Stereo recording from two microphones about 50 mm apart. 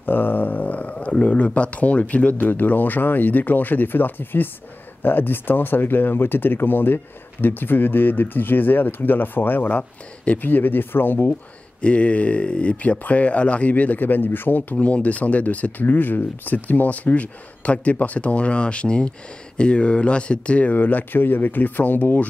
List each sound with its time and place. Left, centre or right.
0.0 s speech: left
2.3 s speech: left
9.7 s speech: left
11.8 s speech: left
14.8 s speech: left
20.7 s speech: left